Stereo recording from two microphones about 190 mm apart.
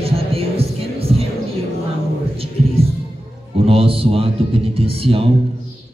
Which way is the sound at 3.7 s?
30° right (ahead or behind).